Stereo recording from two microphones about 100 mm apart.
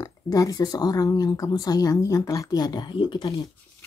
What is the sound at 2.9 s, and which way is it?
Speech, 55° left (ahead or behind).